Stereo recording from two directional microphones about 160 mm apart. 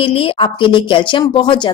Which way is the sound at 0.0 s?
35° left (ahead or behind).